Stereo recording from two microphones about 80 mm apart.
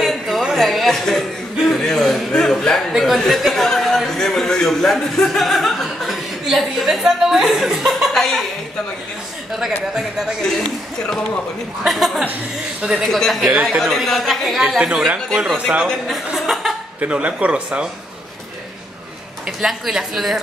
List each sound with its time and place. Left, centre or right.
0.0 s a sound: centre
9.6 s a man's voice: centre
10.4 s a man's voice: centre
14.8 s a man's voice: centre
16.3 s chuckle: centre
17.0 s speech: centre
19.4 s a man's voice: centre